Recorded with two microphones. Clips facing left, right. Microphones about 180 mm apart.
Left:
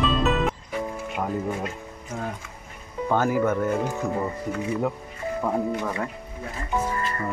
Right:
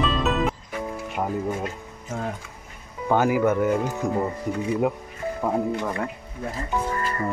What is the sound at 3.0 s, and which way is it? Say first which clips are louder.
Speech: right 2 dB; 10° right (ahead or behind).